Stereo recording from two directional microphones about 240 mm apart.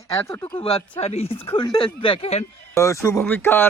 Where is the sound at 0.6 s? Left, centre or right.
Left.